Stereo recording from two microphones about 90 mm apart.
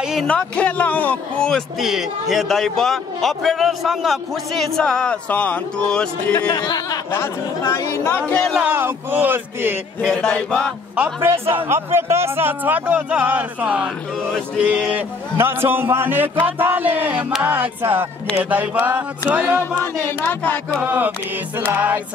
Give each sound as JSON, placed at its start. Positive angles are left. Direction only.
{"t": 0.0, "sound": "music", "side_deg": -5}
{"t": 0.3, "sound": "a man's voice", "side_deg": 15}
{"t": 1.8, "sound": "a man's voice", "side_deg": -5}
{"t": 6.5, "sound": "speech", "side_deg": 55}
{"t": 7.7, "sound": "speech", "side_deg": 30}
{"t": 8.5, "sound": "speech", "side_deg": -20}
{"t": 10.0, "sound": "a man's voice", "side_deg": 15}
{"t": 11.4, "sound": "speech", "side_deg": -25}
{"t": 14.6, "sound": "a sound", "side_deg": -15}
{"t": 15.3, "sound": "speech", "side_deg": -25}
{"t": 18.4, "sound": "a sound", "side_deg": -20}
{"t": 19.5, "sound": "speech", "side_deg": 25}
{"t": 20.8, "sound": "speech", "side_deg": -25}